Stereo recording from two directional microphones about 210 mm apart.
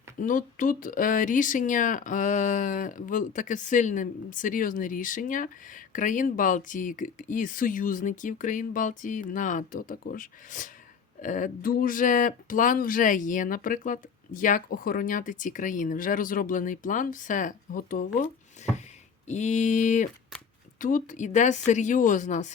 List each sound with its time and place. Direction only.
0.2 s speech: 40° left (ahead or behind)
18.6 s a sound: 35° left (ahead or behind)
19.3 s speech: 35° left (ahead or behind)